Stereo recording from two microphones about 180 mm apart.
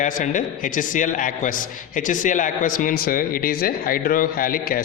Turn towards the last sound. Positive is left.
turn(degrees=50)  # may be behind; listen again after turning